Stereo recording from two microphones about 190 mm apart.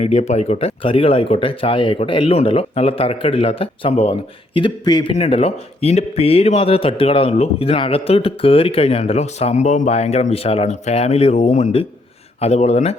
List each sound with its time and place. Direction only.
0.0 s speech: 35° left (ahead or behind)